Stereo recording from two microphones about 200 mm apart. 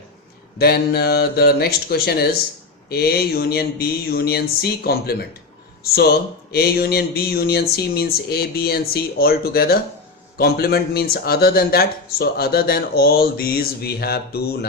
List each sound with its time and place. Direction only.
0.6 s speech: 50° left (ahead or behind)